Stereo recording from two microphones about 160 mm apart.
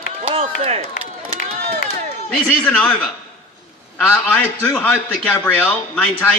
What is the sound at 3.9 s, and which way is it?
A man's voice, 5° left (ahead or behind).